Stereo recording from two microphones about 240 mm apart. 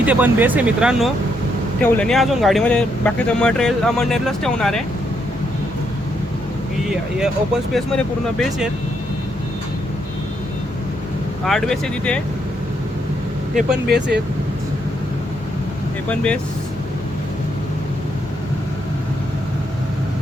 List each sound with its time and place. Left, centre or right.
0.0 s speech: centre
6.8 s speech: centre
11.4 s speech: centre
13.8 s speech: right
16.0 s speech: centre